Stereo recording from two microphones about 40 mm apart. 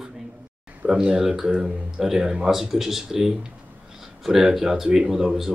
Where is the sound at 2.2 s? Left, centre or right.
Right.